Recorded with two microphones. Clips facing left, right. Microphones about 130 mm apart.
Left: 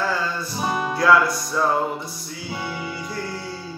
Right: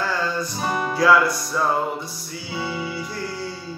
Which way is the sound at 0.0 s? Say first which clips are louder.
Even; 5° left (ahead or behind).